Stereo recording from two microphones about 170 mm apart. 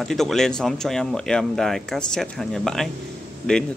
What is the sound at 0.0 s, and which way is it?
Speech, centre (ahead or behind).